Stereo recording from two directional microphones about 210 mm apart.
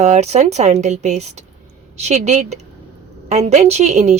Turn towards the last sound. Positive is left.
turn(degrees=-35)  # may be behind; listen again after turning